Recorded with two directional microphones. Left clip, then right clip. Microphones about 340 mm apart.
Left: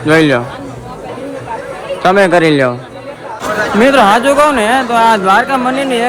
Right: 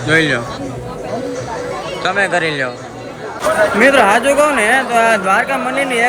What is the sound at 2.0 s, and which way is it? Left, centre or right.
Speech, centre.